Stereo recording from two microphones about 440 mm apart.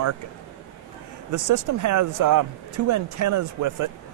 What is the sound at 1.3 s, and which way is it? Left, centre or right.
Speech, right.